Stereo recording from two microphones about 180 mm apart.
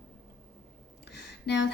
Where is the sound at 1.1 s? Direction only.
70° left (ahead or behind).